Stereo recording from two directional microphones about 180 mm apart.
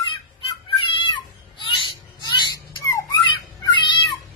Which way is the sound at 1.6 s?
25° left (ahead or behind).